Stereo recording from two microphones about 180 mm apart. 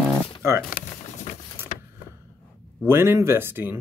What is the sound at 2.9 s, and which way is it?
Speech, 15° right (ahead or behind).